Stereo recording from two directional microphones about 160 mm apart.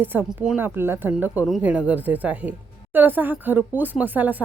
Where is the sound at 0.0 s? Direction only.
10° right (ahead or behind).